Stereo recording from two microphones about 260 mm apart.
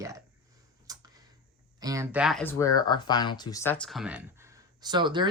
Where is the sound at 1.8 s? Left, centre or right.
Centre.